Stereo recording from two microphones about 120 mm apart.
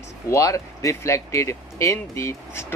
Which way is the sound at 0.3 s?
25° left (ahead or behind).